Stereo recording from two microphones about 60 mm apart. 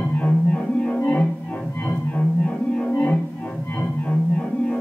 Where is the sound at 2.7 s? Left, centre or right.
Left.